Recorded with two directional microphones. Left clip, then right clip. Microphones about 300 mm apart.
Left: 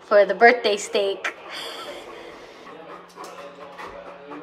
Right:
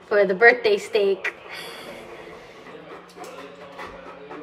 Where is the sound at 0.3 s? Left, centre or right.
Centre.